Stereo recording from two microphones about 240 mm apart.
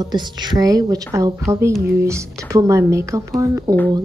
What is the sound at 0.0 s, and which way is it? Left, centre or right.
Speech, centre.